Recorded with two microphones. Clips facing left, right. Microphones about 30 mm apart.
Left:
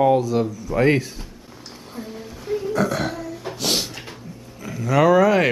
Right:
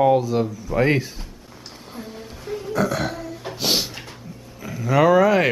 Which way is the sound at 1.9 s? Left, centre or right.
Centre.